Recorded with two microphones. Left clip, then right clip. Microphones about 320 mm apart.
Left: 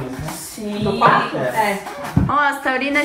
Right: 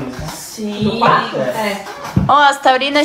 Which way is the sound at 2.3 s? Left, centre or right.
Centre.